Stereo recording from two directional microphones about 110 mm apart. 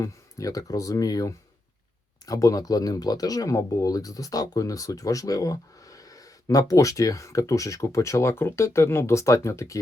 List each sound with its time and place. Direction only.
0.0 s speech: 30° left (ahead or behind)